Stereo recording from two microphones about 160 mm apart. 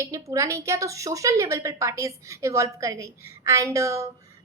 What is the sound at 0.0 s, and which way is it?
A woman's voice, 20° right (ahead or behind).